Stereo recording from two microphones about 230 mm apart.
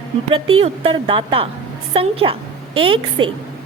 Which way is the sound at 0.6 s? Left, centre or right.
Right.